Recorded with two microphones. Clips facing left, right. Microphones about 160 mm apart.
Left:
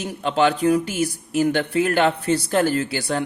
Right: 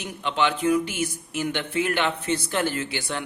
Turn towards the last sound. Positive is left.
turn(degrees=40)  # may be behind; listen again after turning